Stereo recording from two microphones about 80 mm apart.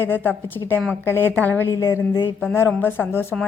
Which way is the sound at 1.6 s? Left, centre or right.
Left.